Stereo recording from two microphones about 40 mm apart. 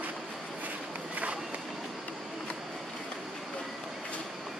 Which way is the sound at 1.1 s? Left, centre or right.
Right.